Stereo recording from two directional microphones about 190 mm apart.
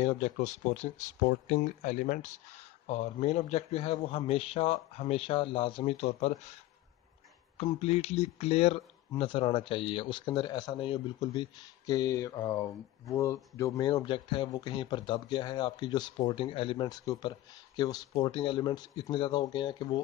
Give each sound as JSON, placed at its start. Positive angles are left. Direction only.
{"t": 0.0, "sound": "a man's voice", "side_deg": 40}
{"t": 7.5, "sound": "a man's voice", "side_deg": 35}